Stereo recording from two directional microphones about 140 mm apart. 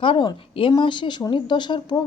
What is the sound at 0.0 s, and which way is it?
Speech, 35° left (ahead or behind).